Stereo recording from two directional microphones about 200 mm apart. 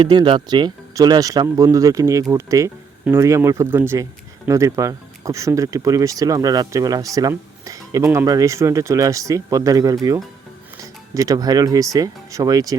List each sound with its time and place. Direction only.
0.0 s speech: 20° right (ahead or behind)